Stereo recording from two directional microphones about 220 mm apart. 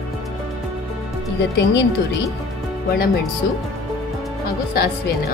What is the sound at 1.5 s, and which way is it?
Speech, 55° left (ahead or behind).